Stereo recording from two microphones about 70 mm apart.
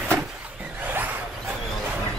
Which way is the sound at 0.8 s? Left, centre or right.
Right.